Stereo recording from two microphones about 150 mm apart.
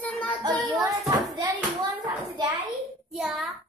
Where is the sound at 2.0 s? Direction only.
30° right (ahead or behind).